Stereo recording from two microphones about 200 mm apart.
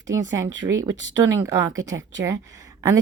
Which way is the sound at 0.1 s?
15° right (ahead or behind).